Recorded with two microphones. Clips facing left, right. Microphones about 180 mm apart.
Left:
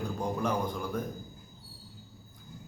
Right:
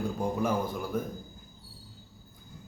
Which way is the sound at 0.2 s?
5° right (ahead or behind).